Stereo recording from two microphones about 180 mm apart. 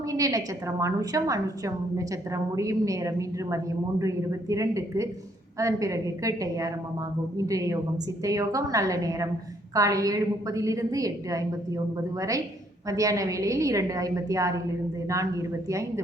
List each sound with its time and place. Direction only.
0.1 s a woman's voice: 20° right (ahead or behind)
12.9 s a woman's voice: 20° right (ahead or behind)